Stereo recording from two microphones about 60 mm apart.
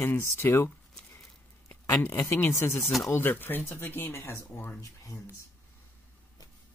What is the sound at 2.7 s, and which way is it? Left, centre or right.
Speech, centre.